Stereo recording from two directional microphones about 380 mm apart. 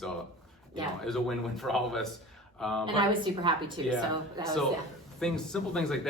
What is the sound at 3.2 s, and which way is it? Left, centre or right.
Speech, centre.